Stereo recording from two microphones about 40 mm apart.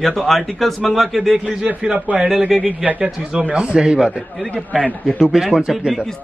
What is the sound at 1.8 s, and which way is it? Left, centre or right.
Speech, centre.